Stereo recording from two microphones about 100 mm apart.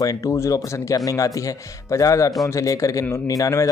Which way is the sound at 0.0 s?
35° left (ahead or behind).